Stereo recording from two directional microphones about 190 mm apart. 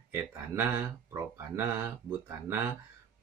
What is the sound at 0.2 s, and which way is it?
Speech, 10° right (ahead or behind).